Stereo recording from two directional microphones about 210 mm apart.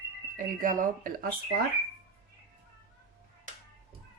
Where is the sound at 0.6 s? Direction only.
40° right (ahead or behind).